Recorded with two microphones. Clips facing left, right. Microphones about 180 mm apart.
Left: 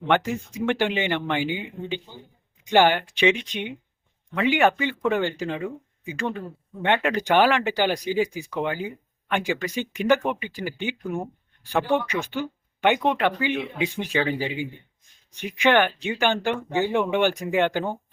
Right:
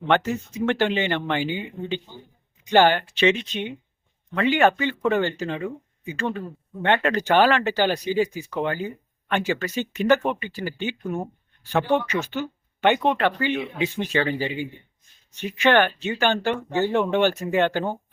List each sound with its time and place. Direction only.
0.1 s speech: 10° left (ahead or behind)
6.8 s speech: 10° left (ahead or behind)